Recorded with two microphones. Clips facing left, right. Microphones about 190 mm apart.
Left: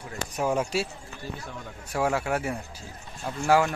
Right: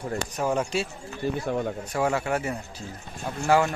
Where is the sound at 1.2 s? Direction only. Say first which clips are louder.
Right 12 dB; 60° right (ahead or behind).